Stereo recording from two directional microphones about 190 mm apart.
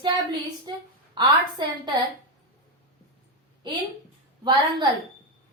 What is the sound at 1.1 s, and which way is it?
Speech, 25° right (ahead or behind).